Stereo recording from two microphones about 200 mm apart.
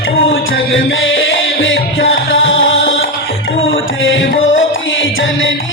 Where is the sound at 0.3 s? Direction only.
70° left (ahead or behind).